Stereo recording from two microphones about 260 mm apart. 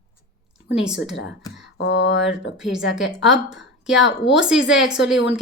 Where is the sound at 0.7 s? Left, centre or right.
Centre.